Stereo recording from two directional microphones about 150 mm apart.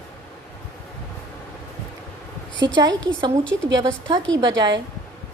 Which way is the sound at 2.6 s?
25° right (ahead or behind).